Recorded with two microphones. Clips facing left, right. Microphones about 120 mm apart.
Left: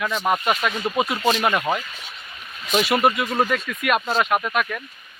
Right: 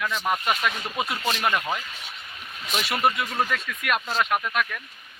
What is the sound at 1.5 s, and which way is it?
Speech, 20° left (ahead or behind).